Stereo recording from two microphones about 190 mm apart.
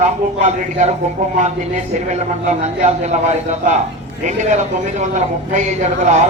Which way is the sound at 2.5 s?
35° right (ahead or behind).